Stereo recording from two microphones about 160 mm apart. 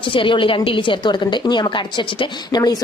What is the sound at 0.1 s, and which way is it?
Speech, 30° left (ahead or behind).